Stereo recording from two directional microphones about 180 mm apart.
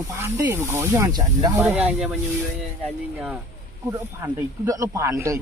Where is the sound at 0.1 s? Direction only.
15° right (ahead or behind).